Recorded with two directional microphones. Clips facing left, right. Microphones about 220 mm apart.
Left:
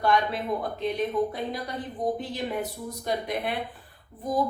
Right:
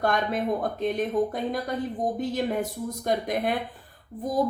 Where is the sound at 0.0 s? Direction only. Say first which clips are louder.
Even; 45° right (ahead or behind).